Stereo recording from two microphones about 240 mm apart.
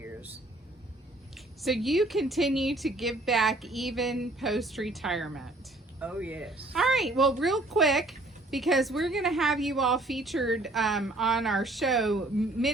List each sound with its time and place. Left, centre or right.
1.6 s speech: centre